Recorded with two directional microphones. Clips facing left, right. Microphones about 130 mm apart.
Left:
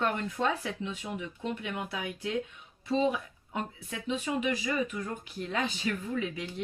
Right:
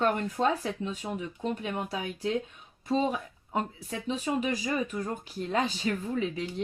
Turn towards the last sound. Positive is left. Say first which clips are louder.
# right 3 dB
turn(degrees=-30)  # may be behind; listen again after turning